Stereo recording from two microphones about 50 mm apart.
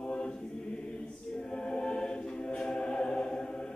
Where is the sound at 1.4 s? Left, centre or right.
Centre.